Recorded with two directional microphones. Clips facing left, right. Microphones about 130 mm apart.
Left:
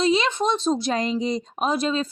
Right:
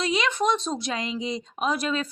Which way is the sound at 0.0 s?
30° left (ahead or behind).